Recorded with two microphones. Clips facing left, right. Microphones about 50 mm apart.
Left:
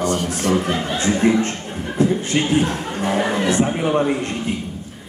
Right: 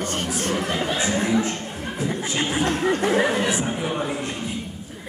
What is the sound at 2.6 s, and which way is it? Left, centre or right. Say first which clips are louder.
Speech: right 1 dB; right.